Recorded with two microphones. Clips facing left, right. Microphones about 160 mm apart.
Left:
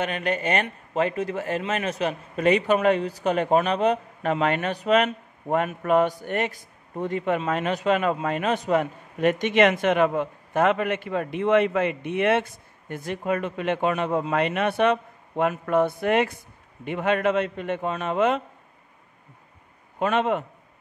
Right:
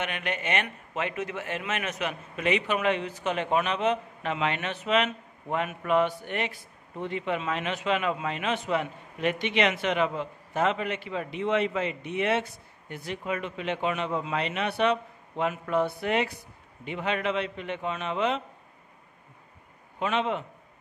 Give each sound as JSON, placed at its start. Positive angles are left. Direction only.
{"t": 0.0, "sound": "a man's voice", "side_deg": 35}
{"t": 20.0, "sound": "a man's voice", "side_deg": 50}